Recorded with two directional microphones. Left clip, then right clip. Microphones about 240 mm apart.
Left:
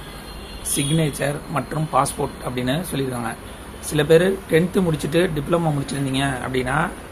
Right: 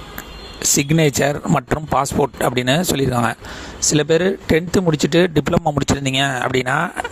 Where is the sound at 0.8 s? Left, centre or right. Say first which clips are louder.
Right 5 dB; right.